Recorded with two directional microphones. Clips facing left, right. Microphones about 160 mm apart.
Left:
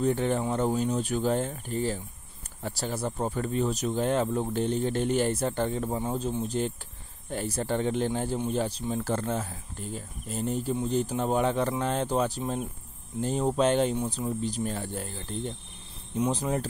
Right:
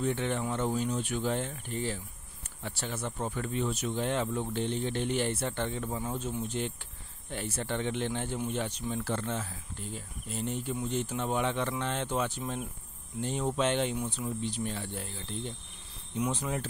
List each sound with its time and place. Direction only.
0.0 s speech: 40° left (ahead or behind)